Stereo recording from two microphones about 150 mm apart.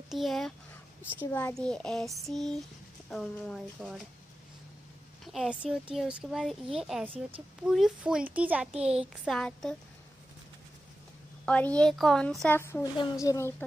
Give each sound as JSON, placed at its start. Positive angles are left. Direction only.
{"t": 0.1, "sound": "a child's voice", "side_deg": 0}
{"t": 1.1, "sound": "a woman's voice", "side_deg": 15}
{"t": 5.2, "sound": "a sound", "side_deg": 0}
{"t": 5.6, "sound": "a child's voice", "side_deg": -5}
{"t": 8.7, "sound": "a sound", "side_deg": -45}
{"t": 9.2, "sound": "a child's voice", "side_deg": 0}
{"t": 11.4, "sound": "a woman's voice", "side_deg": 10}
{"t": 12.5, "sound": "a woman's voice", "side_deg": 15}